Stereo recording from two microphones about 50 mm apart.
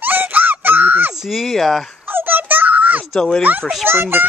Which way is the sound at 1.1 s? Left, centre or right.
Centre.